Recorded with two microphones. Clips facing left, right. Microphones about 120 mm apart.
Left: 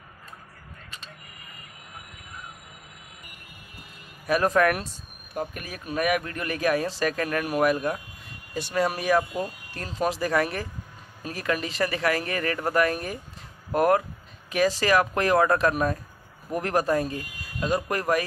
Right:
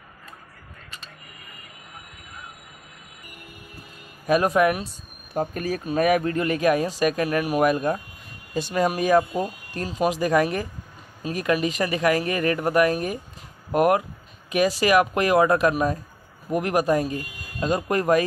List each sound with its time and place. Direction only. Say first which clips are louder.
4.3 s speech: right 2 dB; 15° right (ahead or behind)
5.3 s speech: right 7 dB; 35° right (ahead or behind)
9.8 s speech: right 4 dB; 15° right (ahead or behind)